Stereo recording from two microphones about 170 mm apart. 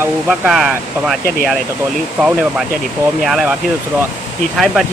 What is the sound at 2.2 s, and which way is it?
Speech, centre (ahead or behind).